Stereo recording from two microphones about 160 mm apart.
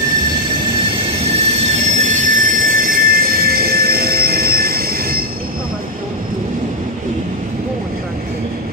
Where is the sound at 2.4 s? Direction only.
65° right (ahead or behind).